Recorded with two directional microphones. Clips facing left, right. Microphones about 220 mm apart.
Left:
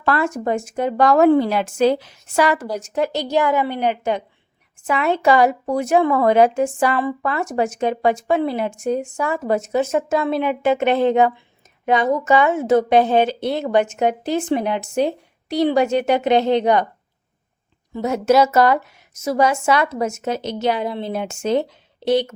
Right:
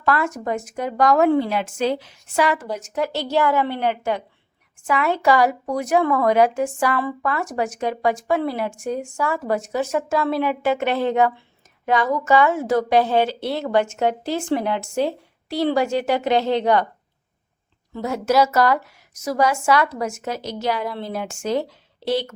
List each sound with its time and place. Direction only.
0.0 s a woman's voice: 30° left (ahead or behind)
3.1 s a woman's voice: 15° left (ahead or behind)
17.9 s a woman's voice: 20° left (ahead or behind)